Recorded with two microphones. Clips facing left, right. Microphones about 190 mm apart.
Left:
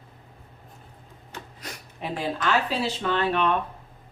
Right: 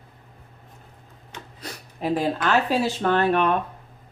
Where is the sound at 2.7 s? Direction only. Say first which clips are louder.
Right 5 dB; 45° right (ahead or behind).